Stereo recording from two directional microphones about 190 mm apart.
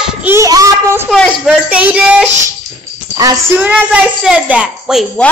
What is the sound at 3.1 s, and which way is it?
Music, 20° right (ahead or behind).